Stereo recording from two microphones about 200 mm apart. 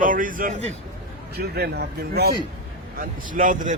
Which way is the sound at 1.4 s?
55° right (ahead or behind).